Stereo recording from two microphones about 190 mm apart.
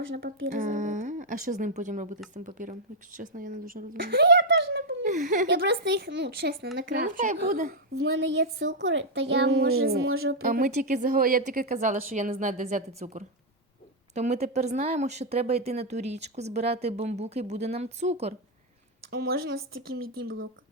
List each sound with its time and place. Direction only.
0.5 s speech: 45° right (ahead or behind)
3.9 s a child's voice: 60° right (ahead or behind)
5.0 s speech: 40° right (ahead or behind)
5.5 s speech: 65° right (ahead or behind)
6.7 s speech: 45° right (ahead or behind)
8.2 s speech: 70° right (ahead or behind)
9.8 s speech: 55° right (ahead or behind)
10.1 s speech: 90° right
10.4 s speech: 45° right (ahead or behind)
19.1 s speech: 55° right (ahead or behind)